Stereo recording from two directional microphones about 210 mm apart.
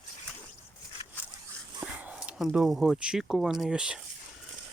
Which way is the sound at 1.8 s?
5° right (ahead or behind).